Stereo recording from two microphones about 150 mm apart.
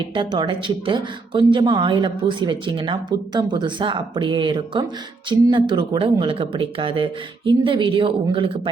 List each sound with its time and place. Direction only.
0.1 s speech: 35° right (ahead or behind)